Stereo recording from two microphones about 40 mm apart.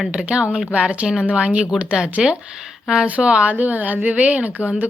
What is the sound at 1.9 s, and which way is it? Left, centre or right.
A woman's voice, centre.